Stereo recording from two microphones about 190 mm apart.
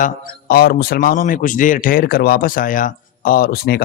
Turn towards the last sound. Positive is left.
turn(degrees=55)  # may be behind; listen again after turning